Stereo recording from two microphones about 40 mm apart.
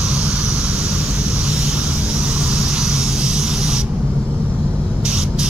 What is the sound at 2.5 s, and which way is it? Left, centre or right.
Spray, centre.